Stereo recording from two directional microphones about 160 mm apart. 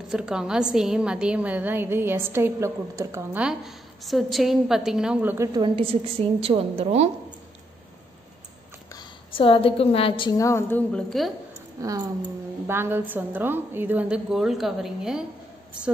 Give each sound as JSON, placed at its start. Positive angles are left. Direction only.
{"t": 0.1, "sound": "a woman's voice", "side_deg": -5}
{"t": 3.4, "sound": "a woman's voice", "side_deg": 0}
{"t": 5.5, "sound": "a woman's voice", "side_deg": -30}
{"t": 9.3, "sound": "a woman's voice", "side_deg": 35}
{"t": 10.4, "sound": "a woman's voice", "side_deg": 15}
{"t": 10.9, "sound": "a woman's voice", "side_deg": 5}
{"t": 11.8, "sound": "a woman's voice", "side_deg": -20}